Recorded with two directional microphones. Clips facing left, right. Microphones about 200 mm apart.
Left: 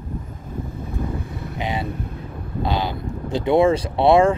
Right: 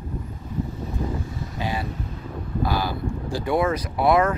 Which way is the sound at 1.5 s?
20° left (ahead or behind).